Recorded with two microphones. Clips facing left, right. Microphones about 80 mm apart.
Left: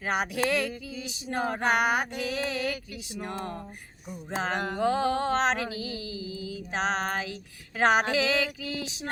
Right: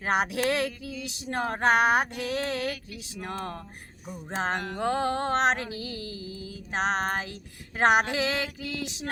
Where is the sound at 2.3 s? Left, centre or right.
Right.